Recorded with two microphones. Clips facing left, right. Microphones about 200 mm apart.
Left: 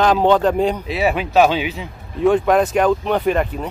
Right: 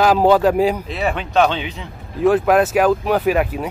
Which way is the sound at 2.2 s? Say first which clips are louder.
Even; 5° right (ahead or behind).